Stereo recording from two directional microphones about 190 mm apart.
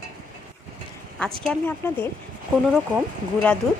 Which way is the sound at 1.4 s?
10° left (ahead or behind).